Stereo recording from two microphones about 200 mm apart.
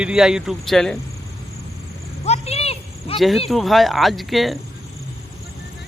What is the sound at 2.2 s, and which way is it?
Cricket, 30° left (ahead or behind).